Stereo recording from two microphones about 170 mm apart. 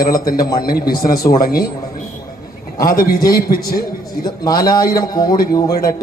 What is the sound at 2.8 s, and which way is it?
A man's voice, 60° left (ahead or behind).